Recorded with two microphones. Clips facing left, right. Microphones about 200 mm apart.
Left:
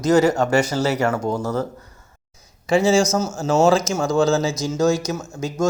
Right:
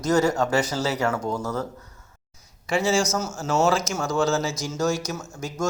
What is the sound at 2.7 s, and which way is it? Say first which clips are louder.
A man's voice: left 6 dB; 30° left (ahead or behind).